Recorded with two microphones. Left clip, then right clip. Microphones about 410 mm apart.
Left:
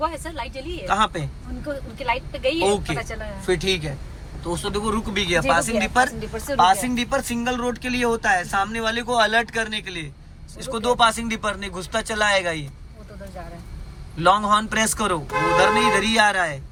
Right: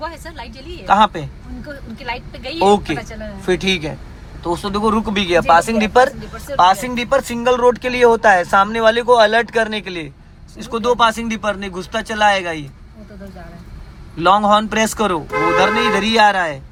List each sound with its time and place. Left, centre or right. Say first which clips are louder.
0.0 s a woman's voice: left 2 dB; centre
0.9 s speech: right 8 dB; centre
2.0 s speech: left 4 dB; centre
2.7 s speech: right 6 dB; centre
14.2 s speech: right 5 dB; centre